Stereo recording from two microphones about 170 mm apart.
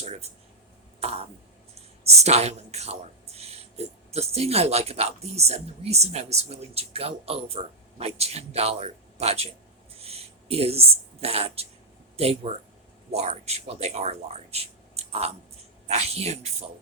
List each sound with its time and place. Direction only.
0.0 s a sound: 40° right (ahead or behind)
0.9 s throat clearing: 40° right (ahead or behind)
2.0 s a woman's voice: 40° right (ahead or behind)